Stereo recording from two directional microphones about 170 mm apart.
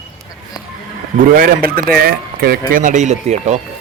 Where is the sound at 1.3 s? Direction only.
60° right (ahead or behind).